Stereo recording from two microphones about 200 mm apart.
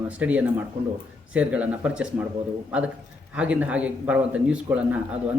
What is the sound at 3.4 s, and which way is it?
Speech, 5° right (ahead or behind).